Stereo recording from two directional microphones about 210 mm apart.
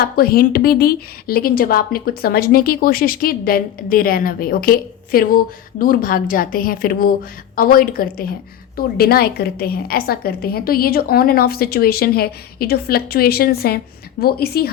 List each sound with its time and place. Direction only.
0.0 s a woman's voice: 45° left (ahead or behind)